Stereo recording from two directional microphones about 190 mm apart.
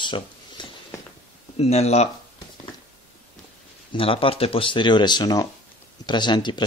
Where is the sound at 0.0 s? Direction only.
25° left (ahead or behind).